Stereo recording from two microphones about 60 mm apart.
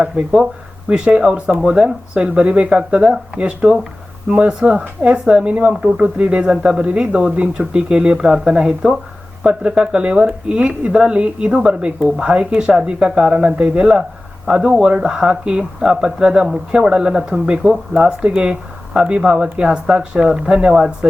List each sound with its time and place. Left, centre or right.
0.0 s speech: centre